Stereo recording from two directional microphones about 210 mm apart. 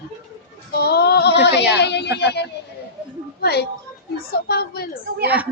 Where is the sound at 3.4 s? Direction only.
50° left (ahead or behind).